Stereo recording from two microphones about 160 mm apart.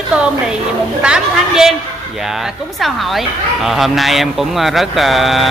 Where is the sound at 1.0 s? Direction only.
5° right (ahead or behind).